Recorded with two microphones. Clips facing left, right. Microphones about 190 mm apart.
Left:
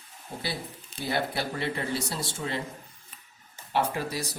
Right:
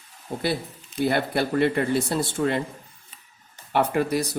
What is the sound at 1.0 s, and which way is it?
Speech, 55° right (ahead or behind).